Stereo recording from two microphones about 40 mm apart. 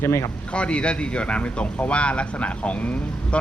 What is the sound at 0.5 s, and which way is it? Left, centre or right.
Speech, left.